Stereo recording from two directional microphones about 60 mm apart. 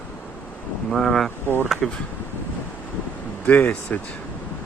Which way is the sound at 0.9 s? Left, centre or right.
Centre.